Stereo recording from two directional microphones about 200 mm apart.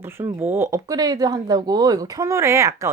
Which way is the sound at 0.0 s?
10° right (ahead or behind).